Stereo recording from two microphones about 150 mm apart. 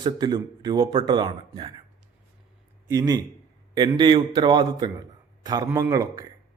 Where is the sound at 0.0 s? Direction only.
30° right (ahead or behind).